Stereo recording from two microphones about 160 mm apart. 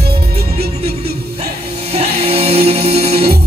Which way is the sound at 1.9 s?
40° right (ahead or behind).